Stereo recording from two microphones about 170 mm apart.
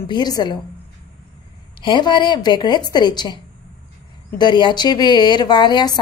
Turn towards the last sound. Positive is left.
turn(degrees=25)  # may be behind; listen again after turning